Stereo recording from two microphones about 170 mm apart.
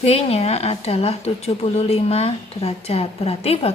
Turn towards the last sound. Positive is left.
turn(degrees=35)  # may be behind; listen again after turning